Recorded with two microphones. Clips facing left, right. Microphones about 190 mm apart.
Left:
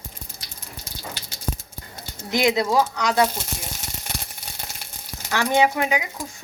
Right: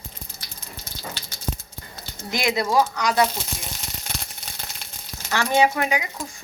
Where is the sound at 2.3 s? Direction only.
20° left (ahead or behind).